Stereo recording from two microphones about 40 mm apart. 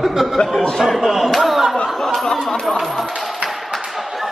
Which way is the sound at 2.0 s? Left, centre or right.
Centre.